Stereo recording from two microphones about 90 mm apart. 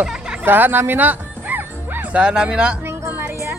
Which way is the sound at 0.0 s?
10° right (ahead or behind).